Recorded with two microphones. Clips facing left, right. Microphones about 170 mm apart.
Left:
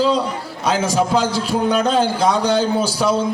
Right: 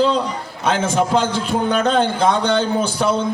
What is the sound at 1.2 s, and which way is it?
Speech, 35° left (ahead or behind).